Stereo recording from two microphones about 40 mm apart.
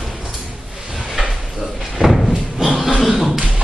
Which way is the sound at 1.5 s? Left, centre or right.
Centre.